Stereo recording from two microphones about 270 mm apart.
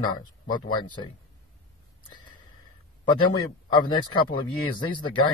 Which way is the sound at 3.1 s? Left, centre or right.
Centre.